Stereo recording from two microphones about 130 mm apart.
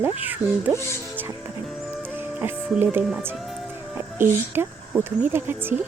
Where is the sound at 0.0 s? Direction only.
15° right (ahead or behind).